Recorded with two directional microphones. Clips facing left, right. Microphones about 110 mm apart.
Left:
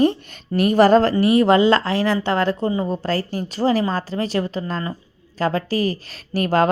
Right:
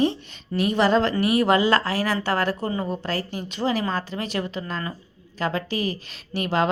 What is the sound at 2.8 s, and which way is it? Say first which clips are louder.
Speech: left 5 dB; 35° left (ahead or behind).